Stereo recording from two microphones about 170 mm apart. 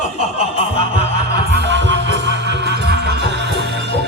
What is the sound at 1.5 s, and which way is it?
Music, 85° right.